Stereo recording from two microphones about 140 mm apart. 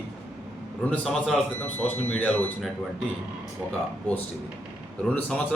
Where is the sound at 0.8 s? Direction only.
5° left (ahead or behind).